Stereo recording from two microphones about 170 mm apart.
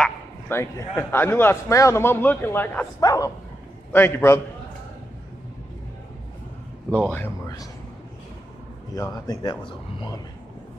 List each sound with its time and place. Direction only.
0.0 s a man's voice: 15° left (ahead or behind)
3.0 s a man's voice: 20° left (ahead or behind)
6.9 s speech: 10° left (ahead or behind)
8.9 s speech: 20° left (ahead or behind)